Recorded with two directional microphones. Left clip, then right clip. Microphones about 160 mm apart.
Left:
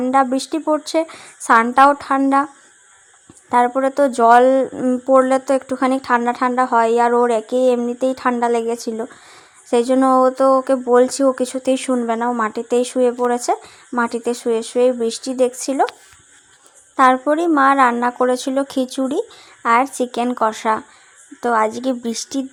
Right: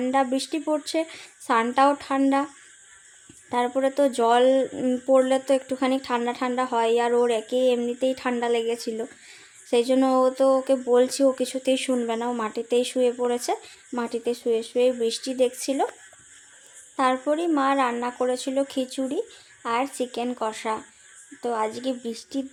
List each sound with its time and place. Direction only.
0.0 s speech: 20° left (ahead or behind)
3.5 s speech: 20° left (ahead or behind)
17.0 s speech: 35° left (ahead or behind)